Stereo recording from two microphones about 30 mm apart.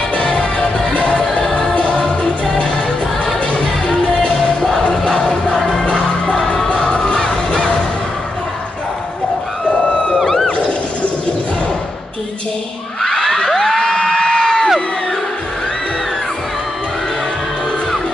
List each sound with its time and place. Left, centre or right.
1.5 s music: left
5.0 s music: left
6.7 s music: left
10.1 s music: centre
10.5 s shatter: left
13.0 s crowd: centre
14.0 s a sound: centre